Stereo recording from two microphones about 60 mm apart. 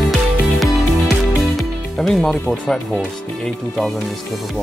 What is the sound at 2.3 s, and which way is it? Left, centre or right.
Speech, centre.